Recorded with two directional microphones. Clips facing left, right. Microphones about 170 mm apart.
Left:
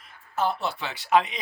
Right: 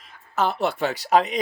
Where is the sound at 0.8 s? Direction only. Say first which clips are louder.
Right 2 dB; 40° right (ahead or behind).